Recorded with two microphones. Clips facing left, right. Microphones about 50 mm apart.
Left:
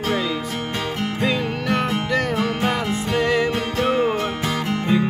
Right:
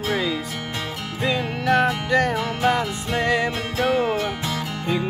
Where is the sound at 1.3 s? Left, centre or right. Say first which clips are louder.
Right 2 dB; centre.